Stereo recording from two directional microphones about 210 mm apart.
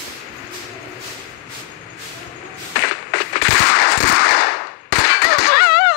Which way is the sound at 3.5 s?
55° left (ahead or behind).